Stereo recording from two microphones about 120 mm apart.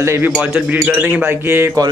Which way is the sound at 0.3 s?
10° right (ahead or behind).